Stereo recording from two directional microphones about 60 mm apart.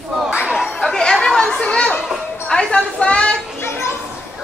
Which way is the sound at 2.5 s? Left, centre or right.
Centre.